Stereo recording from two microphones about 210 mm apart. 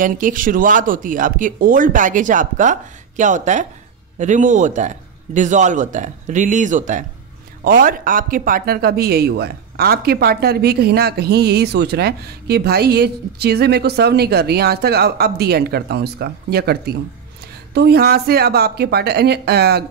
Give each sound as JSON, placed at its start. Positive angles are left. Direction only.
{"t": 0.0, "sound": "speech", "side_deg": -40}